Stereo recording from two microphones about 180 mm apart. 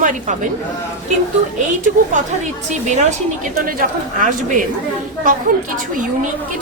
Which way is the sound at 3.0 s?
45° right (ahead or behind).